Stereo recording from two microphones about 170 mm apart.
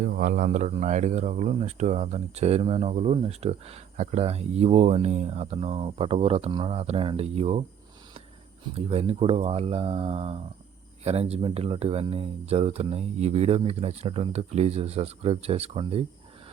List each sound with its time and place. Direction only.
0.0 s speech: 50° right (ahead or behind); by 7.6 s 35° right (ahead or behind)
8.7 s speech: 35° right (ahead or behind)